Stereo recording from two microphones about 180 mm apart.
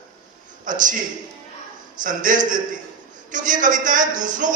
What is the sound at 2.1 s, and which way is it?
A man's voice, 45° right (ahead or behind).